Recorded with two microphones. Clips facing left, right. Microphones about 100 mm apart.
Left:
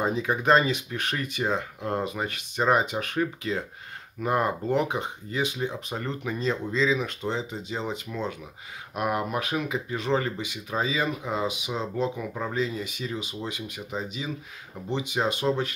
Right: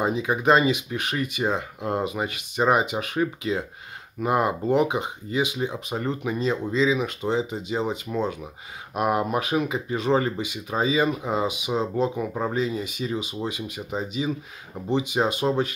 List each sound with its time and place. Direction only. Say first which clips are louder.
0.0 s speech: right 3 dB; 10° right (ahead or behind)
12.2 s speech: right 5 dB; 25° right (ahead or behind)
12.5 s speech: right 3 dB; 15° right (ahead or behind)